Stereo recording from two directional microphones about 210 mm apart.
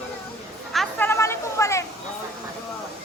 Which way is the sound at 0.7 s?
Centre (ahead or behind).